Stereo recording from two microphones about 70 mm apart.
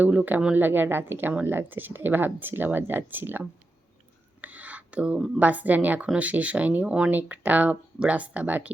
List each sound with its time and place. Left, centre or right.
0.0 s speech: centre
0.5 s speech: right
4.4 s a sound: right
5.4 s speech: right